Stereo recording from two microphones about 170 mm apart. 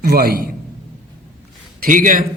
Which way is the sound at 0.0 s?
65° right (ahead or behind).